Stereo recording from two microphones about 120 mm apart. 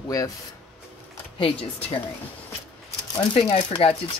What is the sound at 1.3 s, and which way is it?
Speech, 50° left (ahead or behind).